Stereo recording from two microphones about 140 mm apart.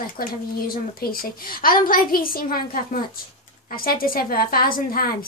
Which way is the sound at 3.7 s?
90° left.